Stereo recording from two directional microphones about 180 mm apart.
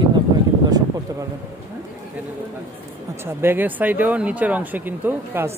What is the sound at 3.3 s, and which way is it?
Speech, 10° right (ahead or behind).